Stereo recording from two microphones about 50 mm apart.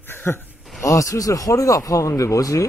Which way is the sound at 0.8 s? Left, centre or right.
Left.